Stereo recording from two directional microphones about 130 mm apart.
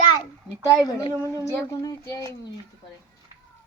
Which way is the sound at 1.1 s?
20° right (ahead or behind).